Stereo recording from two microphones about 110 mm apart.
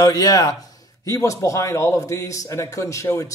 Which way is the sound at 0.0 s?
35° left (ahead or behind).